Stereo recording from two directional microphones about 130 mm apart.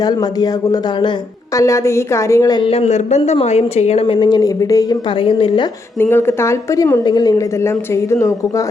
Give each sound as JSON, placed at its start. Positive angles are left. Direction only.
{"t": 0.0, "sound": "a woman's voice", "side_deg": 30}
{"t": 2.6, "sound": "a woman's voice", "side_deg": 50}
{"t": 4.0, "sound": "speech", "side_deg": 35}
{"t": 5.2, "sound": "a woman's voice", "side_deg": 45}
{"t": 6.0, "sound": "a woman's voice", "side_deg": 15}